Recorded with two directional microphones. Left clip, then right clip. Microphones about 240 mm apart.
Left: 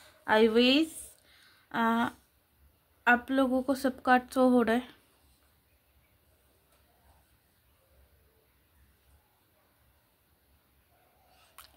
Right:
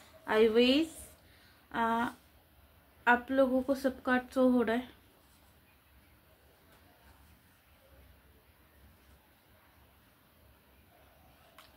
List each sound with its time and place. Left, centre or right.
0.2 s speech: left
11.6 s tick-tock: left